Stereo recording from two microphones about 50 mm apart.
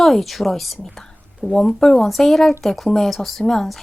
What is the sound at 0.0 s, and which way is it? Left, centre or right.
Speech, centre.